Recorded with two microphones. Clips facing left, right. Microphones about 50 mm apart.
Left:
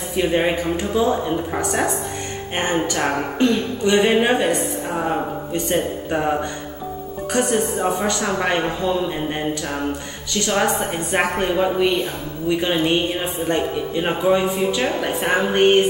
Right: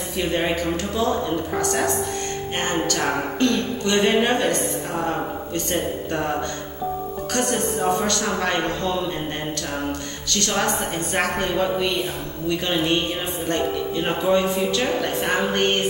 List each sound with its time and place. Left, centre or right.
0.1 s a man's voice: centre